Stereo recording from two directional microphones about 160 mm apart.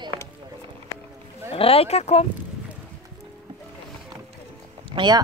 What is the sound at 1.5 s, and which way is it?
Speech, 35° left (ahead or behind).